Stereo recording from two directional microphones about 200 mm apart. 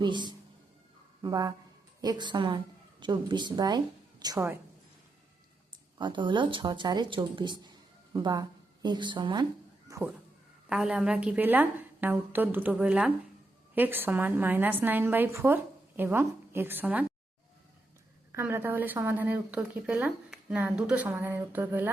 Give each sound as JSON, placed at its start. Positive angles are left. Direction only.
{"t": 0.0, "sound": "a woman's voice", "side_deg": -20}
{"t": 6.0, "sound": "speech", "side_deg": -25}
{"t": 9.9, "sound": "a sound", "side_deg": -15}
{"t": 10.7, "sound": "speech", "side_deg": -5}
{"t": 18.3, "sound": "speech", "side_deg": -10}